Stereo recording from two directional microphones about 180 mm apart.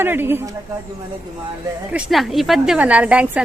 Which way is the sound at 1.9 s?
5° right (ahead or behind).